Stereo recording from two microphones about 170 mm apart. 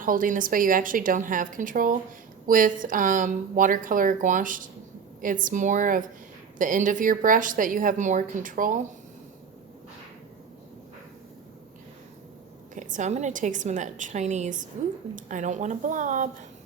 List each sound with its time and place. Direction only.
0.0 s speech: 55° right (ahead or behind)
12.7 s speech: 50° right (ahead or behind)